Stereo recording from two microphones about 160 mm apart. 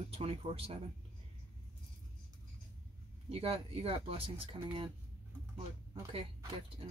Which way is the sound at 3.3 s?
40° right (ahead or behind).